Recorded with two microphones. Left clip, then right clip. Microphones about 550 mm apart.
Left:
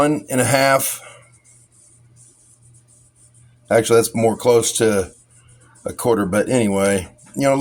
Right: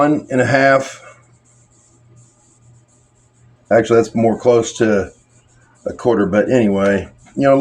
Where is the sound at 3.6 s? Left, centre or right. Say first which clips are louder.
Right 2 dB; left.